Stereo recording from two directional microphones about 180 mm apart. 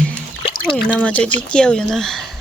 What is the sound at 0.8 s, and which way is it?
Speech, 5° left (ahead or behind).